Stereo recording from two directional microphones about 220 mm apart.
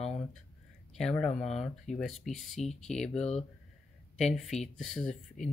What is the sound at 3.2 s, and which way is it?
Speech, 30° left (ahead or behind).